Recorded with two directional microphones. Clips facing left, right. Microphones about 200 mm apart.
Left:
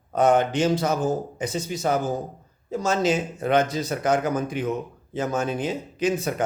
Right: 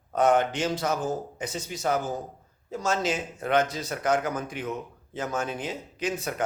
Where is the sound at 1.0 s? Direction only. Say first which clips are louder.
Left 5 dB; 35° left (ahead or behind).